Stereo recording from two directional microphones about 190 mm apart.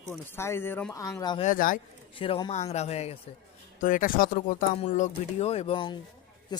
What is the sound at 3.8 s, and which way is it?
A man's voice, 45° left (ahead or behind).